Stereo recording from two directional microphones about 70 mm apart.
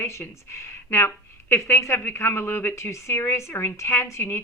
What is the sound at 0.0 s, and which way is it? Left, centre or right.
A woman's voice, left.